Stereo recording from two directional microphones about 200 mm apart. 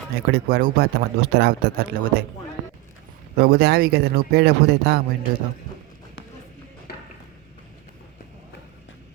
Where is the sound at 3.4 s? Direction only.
50° right (ahead or behind).